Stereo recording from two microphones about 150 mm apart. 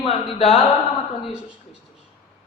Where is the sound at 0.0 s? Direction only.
40° left (ahead or behind).